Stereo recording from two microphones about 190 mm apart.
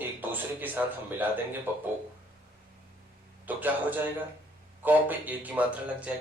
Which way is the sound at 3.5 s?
10° right (ahead or behind).